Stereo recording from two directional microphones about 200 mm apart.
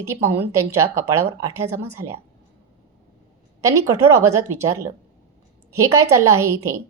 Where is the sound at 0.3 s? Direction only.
15° right (ahead or behind).